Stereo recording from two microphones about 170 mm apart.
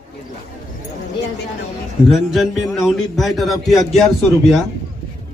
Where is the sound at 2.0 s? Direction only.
Centre (ahead or behind).